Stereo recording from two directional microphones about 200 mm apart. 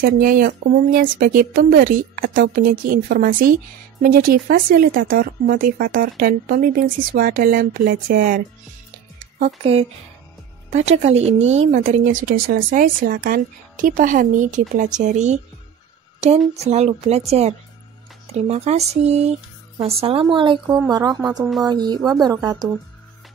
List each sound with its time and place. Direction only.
0.0 s speech: 45° right (ahead or behind)
9.6 s a woman's voice: 30° right (ahead or behind)
16.5 s a woman's voice: 35° right (ahead or behind); by 22.7 s 15° right (ahead or behind)